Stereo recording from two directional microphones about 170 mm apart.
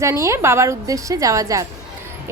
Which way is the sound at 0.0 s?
15° right (ahead or behind).